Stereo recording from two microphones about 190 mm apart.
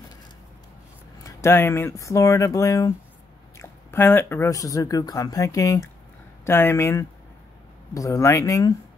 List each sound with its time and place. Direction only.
1.4 s speech: 10° left (ahead or behind)